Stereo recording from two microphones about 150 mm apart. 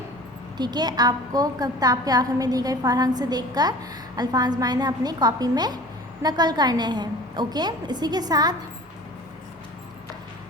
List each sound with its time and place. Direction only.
0.5 s a woman's voice: 30° right (ahead or behind)